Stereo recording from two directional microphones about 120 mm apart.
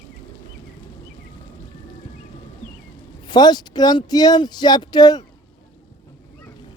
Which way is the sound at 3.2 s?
35° left (ahead or behind).